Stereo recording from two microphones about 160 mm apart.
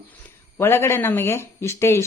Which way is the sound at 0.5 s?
15° left (ahead or behind).